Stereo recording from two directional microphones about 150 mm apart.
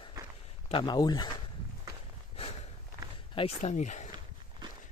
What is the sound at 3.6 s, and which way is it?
Speech, 55° left (ahead or behind).